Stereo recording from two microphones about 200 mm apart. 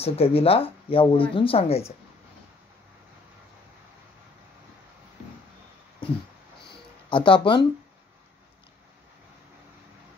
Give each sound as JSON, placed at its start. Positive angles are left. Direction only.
{"t": 0.0, "sound": "speech", "side_deg": 30}
{"t": 7.1, "sound": "speech", "side_deg": 25}